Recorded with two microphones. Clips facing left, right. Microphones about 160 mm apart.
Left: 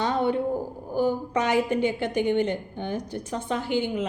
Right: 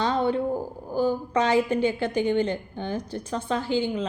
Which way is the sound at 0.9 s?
15° left (ahead or behind).